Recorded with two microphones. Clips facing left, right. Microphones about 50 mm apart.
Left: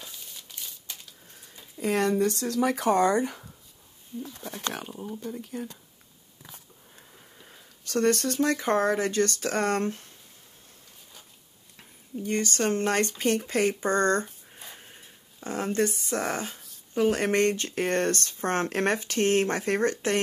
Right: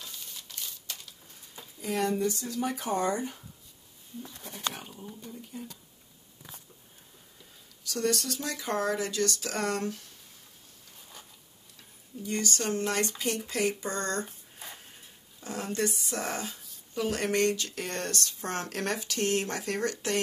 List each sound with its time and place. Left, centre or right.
1.8 s speech: left
5.2 s speech: left
7.4 s speech: left
12.2 s speech: left
15.4 s speech: left